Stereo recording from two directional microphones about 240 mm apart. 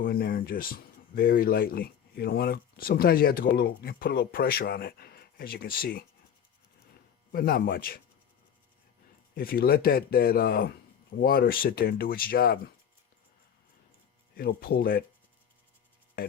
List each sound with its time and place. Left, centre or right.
0.0 s speech: left
7.3 s speech: left
9.3 s speech: left
14.3 s speech: left